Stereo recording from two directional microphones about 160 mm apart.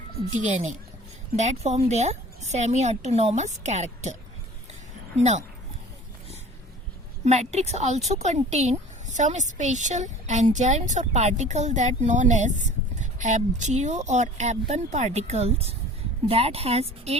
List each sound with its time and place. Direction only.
0.4 s a woman's voice: 50° right (ahead or behind)
7.3 s a woman's voice: 40° right (ahead or behind)